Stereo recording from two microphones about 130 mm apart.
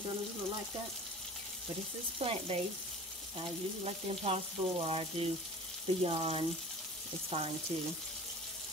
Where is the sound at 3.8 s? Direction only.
50° right (ahead or behind).